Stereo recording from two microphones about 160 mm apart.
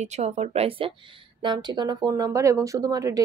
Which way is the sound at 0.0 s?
45° right (ahead or behind).